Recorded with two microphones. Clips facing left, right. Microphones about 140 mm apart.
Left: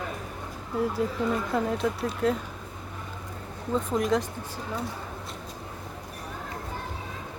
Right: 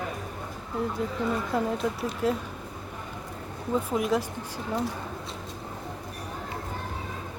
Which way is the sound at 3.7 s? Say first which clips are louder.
Left 1 dB; 5° right (ahead or behind).